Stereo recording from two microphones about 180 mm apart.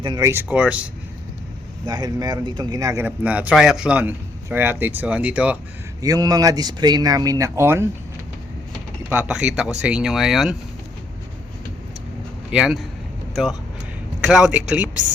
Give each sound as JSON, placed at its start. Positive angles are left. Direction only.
{"t": 0.0, "sound": "speech", "side_deg": -20}
{"t": 0.4, "sound": "speech", "side_deg": -5}
{"t": 1.9, "sound": "speech", "side_deg": -20}
{"t": 6.0, "sound": "speech", "side_deg": -20}
{"t": 9.0, "sound": "speech", "side_deg": -5}
{"t": 12.5, "sound": "speech", "side_deg": -5}
{"t": 14.2, "sound": "speech", "side_deg": -5}